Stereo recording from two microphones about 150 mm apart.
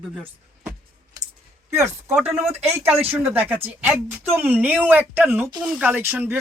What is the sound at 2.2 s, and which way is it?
Speech, 10° right (ahead or behind).